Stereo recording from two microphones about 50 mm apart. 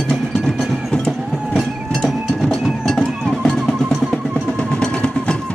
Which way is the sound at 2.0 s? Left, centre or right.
Centre.